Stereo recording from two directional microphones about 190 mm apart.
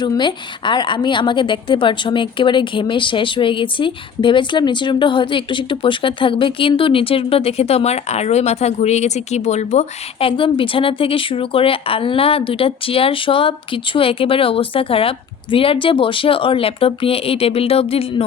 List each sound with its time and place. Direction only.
0.0 s a woman's voice: 25° left (ahead or behind)